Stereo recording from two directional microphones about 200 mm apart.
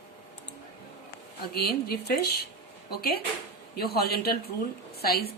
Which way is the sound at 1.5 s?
50° left (ahead or behind).